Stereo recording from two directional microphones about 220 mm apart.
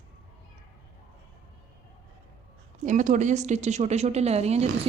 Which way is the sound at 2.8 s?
35° right (ahead or behind).